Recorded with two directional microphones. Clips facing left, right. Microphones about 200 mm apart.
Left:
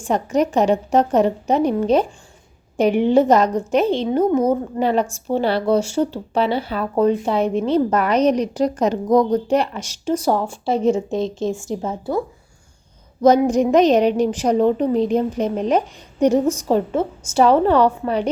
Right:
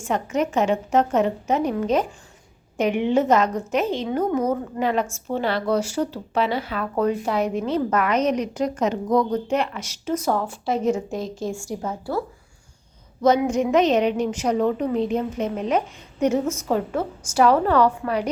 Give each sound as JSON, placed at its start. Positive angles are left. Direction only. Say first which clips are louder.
{"t": 0.0, "sound": "speech", "louder": "left 4 dB", "side_deg": 35}
{"t": 13.2, "sound": "a woman's voice", "louder": "left 5 dB", "side_deg": 40}